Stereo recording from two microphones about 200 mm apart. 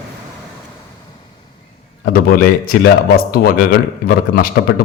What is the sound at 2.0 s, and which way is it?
A man's voice, 50° left (ahead or behind).